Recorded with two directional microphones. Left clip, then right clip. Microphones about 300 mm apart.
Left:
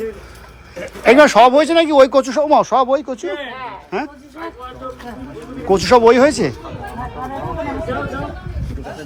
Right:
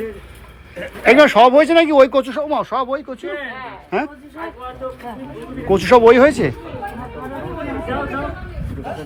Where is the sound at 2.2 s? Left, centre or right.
Left.